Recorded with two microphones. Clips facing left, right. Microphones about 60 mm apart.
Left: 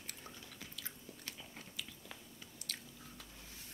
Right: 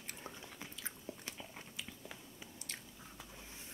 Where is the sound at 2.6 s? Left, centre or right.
Right.